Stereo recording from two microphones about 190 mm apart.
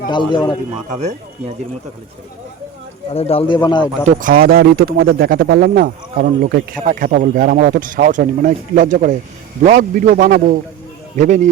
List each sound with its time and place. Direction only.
0.0 s speech: 25° left (ahead or behind)
0.9 s speech: 40° right (ahead or behind)
3.1 s speech: 30° left (ahead or behind)
4.0 s speech: 45° right (ahead or behind)